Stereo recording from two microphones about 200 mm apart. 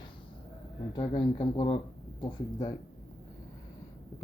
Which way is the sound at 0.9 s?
25° left (ahead or behind).